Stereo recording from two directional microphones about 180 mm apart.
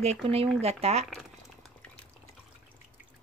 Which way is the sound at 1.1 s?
Centre (ahead or behind).